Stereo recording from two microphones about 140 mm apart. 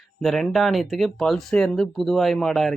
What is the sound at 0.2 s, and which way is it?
Speech, centre (ahead or behind).